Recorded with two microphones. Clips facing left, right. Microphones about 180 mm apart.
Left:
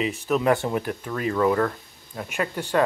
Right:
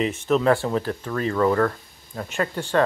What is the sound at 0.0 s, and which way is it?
Speech, 5° left (ahead or behind).